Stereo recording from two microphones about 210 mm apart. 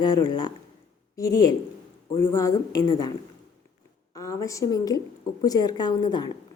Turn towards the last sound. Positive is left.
turn(degrees=20)  # may be behind; listen again after turning